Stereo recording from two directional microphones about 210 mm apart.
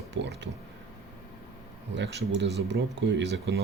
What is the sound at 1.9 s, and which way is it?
Speech, 55° right (ahead or behind).